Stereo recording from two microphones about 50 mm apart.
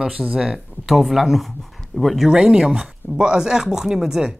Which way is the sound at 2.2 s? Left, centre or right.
Centre.